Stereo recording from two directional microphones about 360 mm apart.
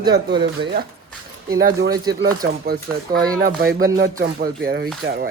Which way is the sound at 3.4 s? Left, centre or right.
Right.